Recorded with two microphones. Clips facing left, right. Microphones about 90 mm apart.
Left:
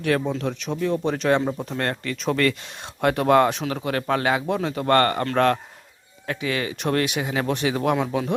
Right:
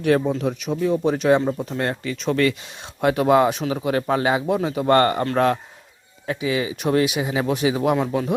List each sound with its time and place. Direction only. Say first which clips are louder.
0.3 s speech: right 3 dB; 10° right (ahead or behind)
5.2 s speech: right 1 dB; 5° right (ahead or behind)